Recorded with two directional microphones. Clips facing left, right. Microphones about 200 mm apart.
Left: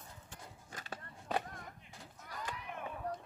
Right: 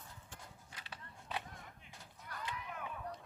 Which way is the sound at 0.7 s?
45° left (ahead or behind).